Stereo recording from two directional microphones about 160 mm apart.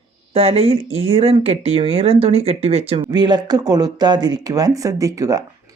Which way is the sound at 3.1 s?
25° right (ahead or behind).